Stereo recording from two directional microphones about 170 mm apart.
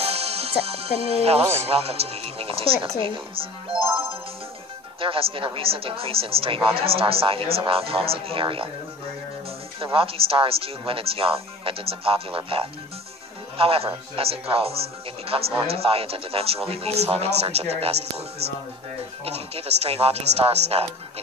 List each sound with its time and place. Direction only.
0.0 s music: 35° right (ahead or behind)
1.7 s speech: 35° right (ahead or behind)
5.0 s speech: 30° right (ahead or behind)
9.8 s speech: 35° right (ahead or behind)
19.2 s speech: 35° right (ahead or behind)